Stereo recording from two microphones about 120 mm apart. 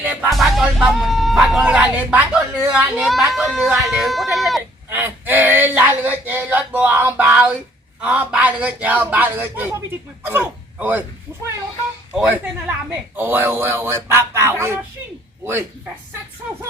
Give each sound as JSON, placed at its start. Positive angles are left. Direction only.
{"t": 0.0, "sound": "music", "side_deg": -10}
{"t": 0.3, "sound": "speech", "side_deg": 0}
{"t": 3.0, "sound": "speech", "side_deg": 0}
{"t": 4.9, "sound": "a man's voice", "side_deg": -20}
{"t": 10.8, "sound": "speech", "side_deg": -15}
{"t": 12.1, "sound": "speech", "side_deg": -10}